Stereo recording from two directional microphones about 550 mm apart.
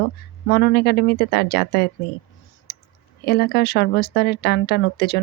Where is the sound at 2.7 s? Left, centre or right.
Centre.